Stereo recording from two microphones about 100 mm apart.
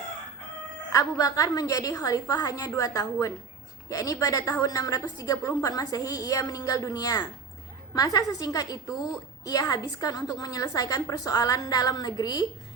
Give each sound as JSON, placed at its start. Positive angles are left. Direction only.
{"t": 0.9, "sound": "a woman's voice", "side_deg": 35}